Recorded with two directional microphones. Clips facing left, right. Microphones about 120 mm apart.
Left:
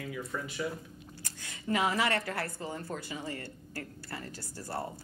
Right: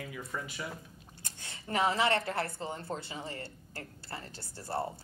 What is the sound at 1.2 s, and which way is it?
A woman's voice, 30° right (ahead or behind).